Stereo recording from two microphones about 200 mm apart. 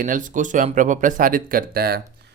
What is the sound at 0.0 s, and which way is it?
Speech, 40° right (ahead or behind).